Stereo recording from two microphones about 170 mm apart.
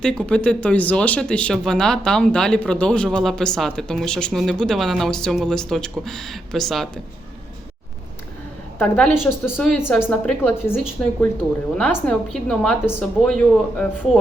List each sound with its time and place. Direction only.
0.0 s speech: 5° left (ahead or behind)
8.8 s a woman's voice: 5° left (ahead or behind)